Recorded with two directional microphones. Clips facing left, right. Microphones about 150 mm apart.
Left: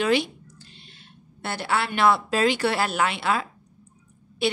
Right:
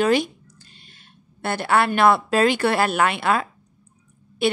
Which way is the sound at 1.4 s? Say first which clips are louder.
Right 6 dB; 55° right (ahead or behind).